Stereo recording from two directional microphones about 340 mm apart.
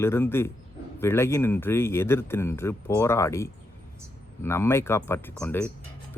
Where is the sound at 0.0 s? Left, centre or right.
Centre.